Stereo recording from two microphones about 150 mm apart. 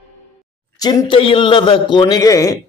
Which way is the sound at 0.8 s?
30° left (ahead or behind).